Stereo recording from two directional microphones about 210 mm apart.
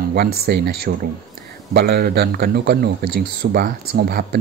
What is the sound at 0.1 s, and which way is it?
Speech, 50° right (ahead or behind).